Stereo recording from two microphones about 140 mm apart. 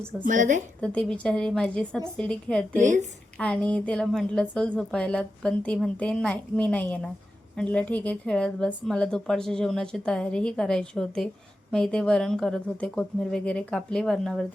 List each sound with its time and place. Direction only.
0.3 s a woman's voice: 65° right (ahead or behind)
0.8 s a woman's voice: 10° left (ahead or behind)
2.8 s a woman's voice: 60° right (ahead or behind)
3.3 s a woman's voice: 5° left (ahead or behind)